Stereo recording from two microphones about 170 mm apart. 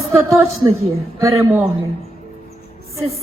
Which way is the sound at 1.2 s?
15° right (ahead or behind).